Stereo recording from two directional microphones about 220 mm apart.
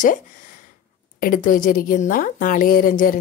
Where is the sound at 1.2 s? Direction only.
40° left (ahead or behind).